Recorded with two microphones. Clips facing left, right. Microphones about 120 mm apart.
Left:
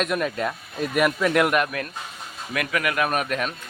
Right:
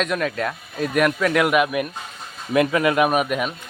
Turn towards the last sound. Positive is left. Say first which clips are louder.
# right 4 dB
turn(degrees=-10)  # may be behind; listen again after turning